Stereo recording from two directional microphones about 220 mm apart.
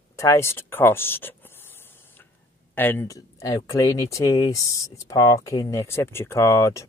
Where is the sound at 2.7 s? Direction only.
10° left (ahead or behind).